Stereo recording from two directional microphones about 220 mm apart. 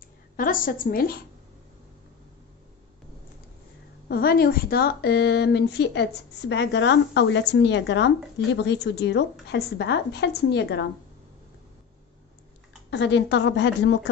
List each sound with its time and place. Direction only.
0.4 s a woman's voice: 40° left (ahead or behind)
4.1 s a woman's voice: 45° left (ahead or behind)
12.9 s a woman's voice: 50° left (ahead or behind)